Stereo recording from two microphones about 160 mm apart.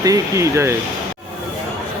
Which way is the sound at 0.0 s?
20° right (ahead or behind).